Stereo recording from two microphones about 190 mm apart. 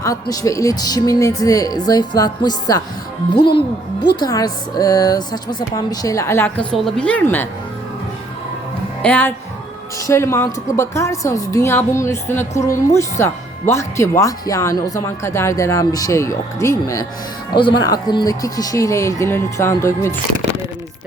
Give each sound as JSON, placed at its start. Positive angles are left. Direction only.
{"t": 0.0, "sound": "a woman's voice", "side_deg": 15}
{"t": 9.0, "sound": "music", "side_deg": 10}
{"t": 10.0, "sound": "a woman's voice", "side_deg": 15}